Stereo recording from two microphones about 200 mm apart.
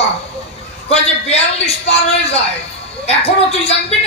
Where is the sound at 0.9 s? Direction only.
30° left (ahead or behind).